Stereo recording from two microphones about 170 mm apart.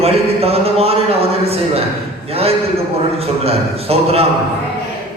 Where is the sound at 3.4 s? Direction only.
35° right (ahead or behind).